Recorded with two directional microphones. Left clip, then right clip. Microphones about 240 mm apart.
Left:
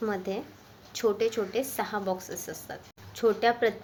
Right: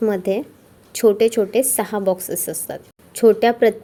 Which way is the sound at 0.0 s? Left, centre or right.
Right.